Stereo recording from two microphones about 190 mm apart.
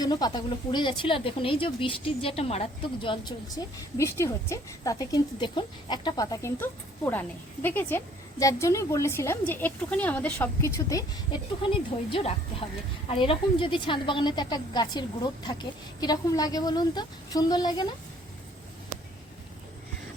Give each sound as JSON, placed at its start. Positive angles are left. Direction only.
{"t": 0.0, "sound": "speech", "side_deg": 20}
{"t": 11.6, "sound": "a woman's voice", "side_deg": 25}